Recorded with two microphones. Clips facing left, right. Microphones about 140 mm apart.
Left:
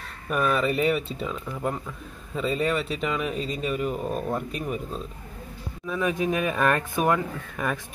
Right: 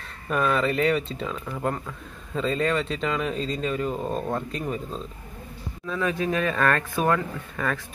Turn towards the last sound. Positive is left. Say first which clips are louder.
# even
turn(degrees=15)  # may be behind; listen again after turning